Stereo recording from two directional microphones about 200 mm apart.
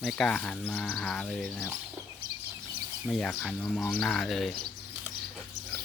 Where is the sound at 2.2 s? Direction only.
50° right (ahead or behind).